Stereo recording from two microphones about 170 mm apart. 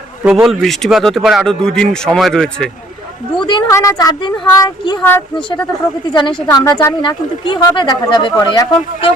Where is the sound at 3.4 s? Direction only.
25° left (ahead or behind).